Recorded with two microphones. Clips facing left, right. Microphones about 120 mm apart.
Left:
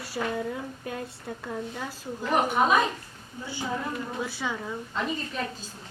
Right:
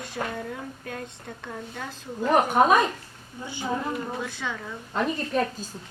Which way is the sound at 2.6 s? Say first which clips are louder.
Right 5 dB; 55° right (ahead or behind).